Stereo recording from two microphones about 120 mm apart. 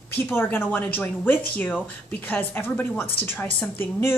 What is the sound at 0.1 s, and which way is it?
A woman's voice, 15° left (ahead or behind).